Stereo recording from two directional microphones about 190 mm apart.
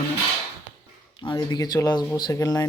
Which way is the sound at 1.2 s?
25° left (ahead or behind).